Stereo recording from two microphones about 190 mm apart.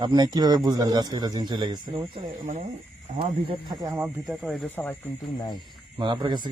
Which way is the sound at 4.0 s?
Centre (ahead or behind).